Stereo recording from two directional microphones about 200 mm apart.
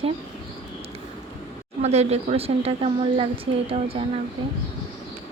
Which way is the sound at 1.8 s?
35° right (ahead or behind).